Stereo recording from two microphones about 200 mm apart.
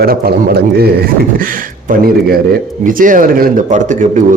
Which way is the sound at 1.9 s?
50° right (ahead or behind).